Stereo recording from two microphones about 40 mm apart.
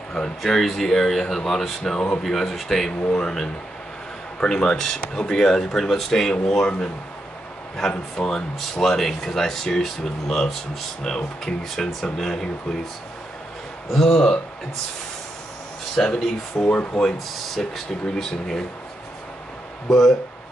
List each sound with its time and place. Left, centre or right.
0.1 s speech: centre
3.1 s speech: centre
7.9 s speech: left
8.5 s speech: centre
13.9 s speech: centre
16.0 s speech: centre
16.6 s speech: left
17.6 s speech: centre
19.9 s speech: centre